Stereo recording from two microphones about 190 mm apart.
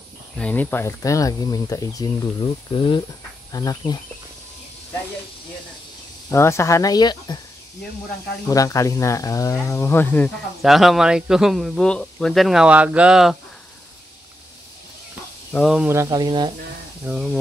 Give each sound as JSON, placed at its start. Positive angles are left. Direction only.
{"t": 0.4, "sound": "speech", "side_deg": 5}
{"t": 6.3, "sound": "speech", "side_deg": 15}
{"t": 8.5, "sound": "speech", "side_deg": 20}
{"t": 15.5, "sound": "speech", "side_deg": 0}
{"t": 15.9, "sound": "speech", "side_deg": -20}
{"t": 17.0, "sound": "speech", "side_deg": -5}